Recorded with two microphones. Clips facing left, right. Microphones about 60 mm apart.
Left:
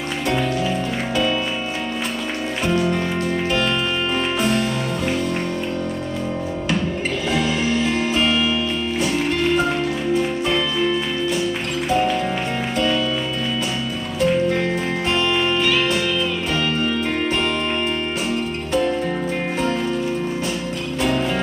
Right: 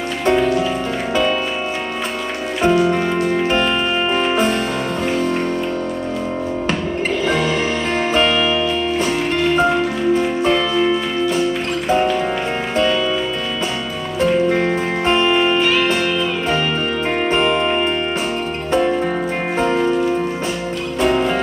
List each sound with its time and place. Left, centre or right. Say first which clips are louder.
0.3 s music: right 7 dB; centre
2.6 s music: right 6 dB; centre
7.3 s music: right 1 dB; right
11.9 s music: right 3 dB; centre
14.5 s music: right 4 dB; right
17.3 s music: right 5 dB; right
19.5 s music: right 7 dB; right
21.0 s music: right 4 dB; centre